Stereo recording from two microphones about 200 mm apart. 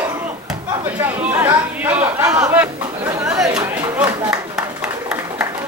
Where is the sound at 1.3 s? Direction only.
10° right (ahead or behind).